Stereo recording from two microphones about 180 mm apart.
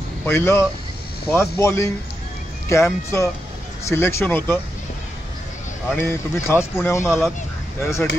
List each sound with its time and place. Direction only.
0.2 s speech: 15° left (ahead or behind)
5.9 s speech: 15° left (ahead or behind)